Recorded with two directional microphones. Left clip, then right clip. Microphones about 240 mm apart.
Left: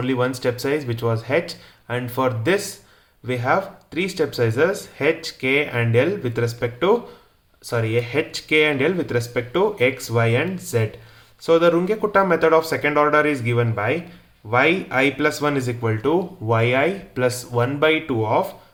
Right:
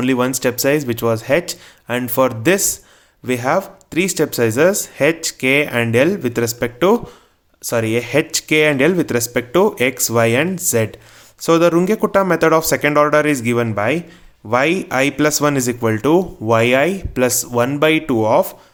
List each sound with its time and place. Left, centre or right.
0.0 s speech: right